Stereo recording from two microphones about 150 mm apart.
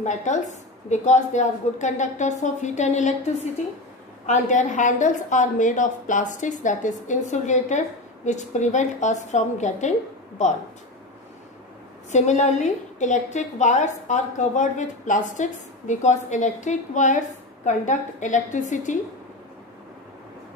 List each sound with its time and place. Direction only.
0.0 s a woman's voice: 55° left (ahead or behind)
4.3 s a woman's voice: 55° left (ahead or behind)
12.1 s a woman's voice: 50° left (ahead or behind)